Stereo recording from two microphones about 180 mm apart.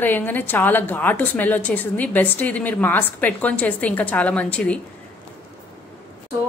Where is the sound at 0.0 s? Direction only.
10° left (ahead or behind).